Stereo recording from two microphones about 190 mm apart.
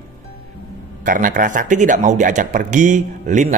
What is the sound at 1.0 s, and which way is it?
Speech, 45° right (ahead or behind).